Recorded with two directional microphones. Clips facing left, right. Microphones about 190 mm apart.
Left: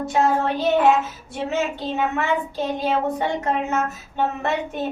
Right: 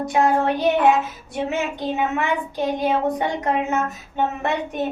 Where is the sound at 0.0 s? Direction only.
15° right (ahead or behind).